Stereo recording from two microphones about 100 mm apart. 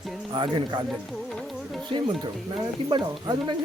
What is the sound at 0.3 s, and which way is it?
Speech, 55° right (ahead or behind).